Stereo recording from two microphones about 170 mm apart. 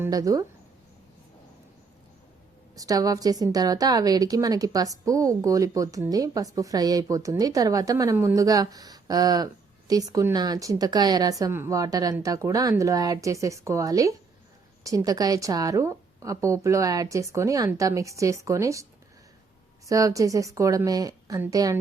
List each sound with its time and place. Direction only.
0.0 s a woman's voice: 20° right (ahead or behind)
2.7 s a woman's voice: 20° right (ahead or behind)